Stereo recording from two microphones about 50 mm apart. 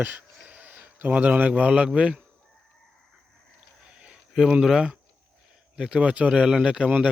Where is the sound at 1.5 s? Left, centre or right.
Right.